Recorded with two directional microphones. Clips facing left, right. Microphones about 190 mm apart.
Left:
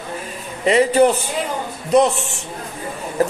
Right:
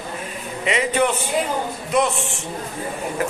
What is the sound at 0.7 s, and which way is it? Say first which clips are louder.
Speech: left 7 dB; 35° left (ahead or behind).